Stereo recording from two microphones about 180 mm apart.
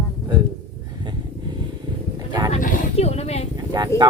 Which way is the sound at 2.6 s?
40° left (ahead or behind).